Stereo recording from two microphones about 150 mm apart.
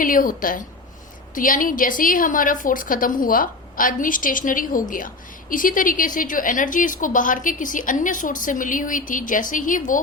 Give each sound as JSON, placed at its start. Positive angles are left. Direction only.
{"t": 0.0, "sound": "a woman's voice", "side_deg": 65}